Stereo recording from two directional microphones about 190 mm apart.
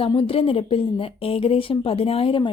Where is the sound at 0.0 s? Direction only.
30° left (ahead or behind).